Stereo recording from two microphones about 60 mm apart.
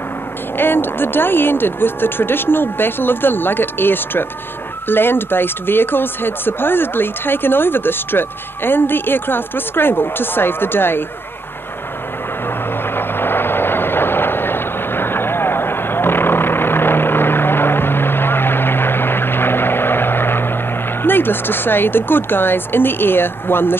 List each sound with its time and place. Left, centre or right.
0.6 s speech: left
12.9 s vehicle: left
21.0 s speech: left